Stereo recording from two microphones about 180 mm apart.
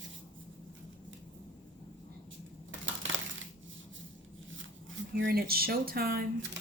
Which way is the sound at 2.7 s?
90° right.